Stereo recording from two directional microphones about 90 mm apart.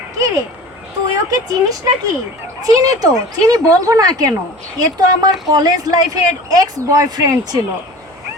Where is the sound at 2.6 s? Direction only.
40° right (ahead or behind).